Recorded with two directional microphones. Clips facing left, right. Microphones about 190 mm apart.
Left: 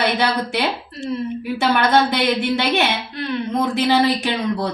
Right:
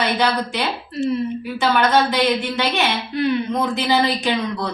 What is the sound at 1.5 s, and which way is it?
A woman's voice, 60° left (ahead or behind).